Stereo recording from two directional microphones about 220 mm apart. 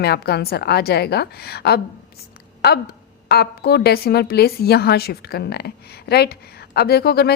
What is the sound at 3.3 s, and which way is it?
A woman's voice, 45° left (ahead or behind).